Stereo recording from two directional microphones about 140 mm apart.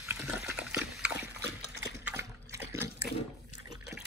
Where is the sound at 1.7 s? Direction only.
20° right (ahead or behind).